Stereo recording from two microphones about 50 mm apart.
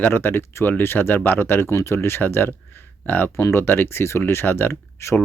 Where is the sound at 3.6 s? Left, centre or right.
Left.